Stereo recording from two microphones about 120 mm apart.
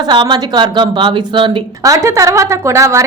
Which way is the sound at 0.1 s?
40° right (ahead or behind).